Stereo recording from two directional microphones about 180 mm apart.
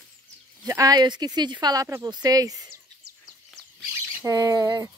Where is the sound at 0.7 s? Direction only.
20° right (ahead or behind).